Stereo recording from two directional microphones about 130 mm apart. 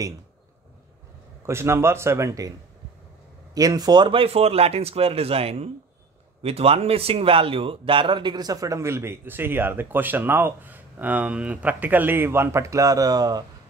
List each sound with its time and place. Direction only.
1.4 s speech: 20° right (ahead or behind)
3.5 s speech: 30° right (ahead or behind)